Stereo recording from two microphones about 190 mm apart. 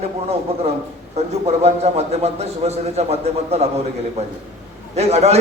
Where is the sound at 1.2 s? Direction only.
35° right (ahead or behind).